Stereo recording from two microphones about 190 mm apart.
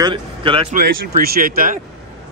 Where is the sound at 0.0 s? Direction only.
25° right (ahead or behind).